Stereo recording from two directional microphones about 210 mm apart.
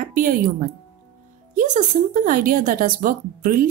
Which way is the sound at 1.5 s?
40° right (ahead or behind).